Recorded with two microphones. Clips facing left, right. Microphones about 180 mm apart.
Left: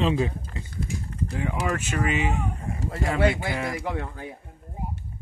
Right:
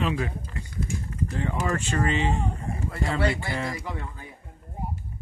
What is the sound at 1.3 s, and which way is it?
Speech, 10° left (ahead or behind).